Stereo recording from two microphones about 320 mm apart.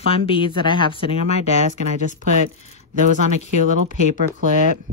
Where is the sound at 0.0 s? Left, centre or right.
Centre.